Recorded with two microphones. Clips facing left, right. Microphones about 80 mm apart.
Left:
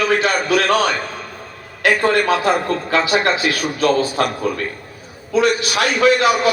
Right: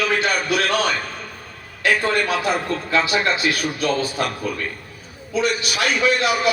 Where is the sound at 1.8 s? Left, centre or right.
Left.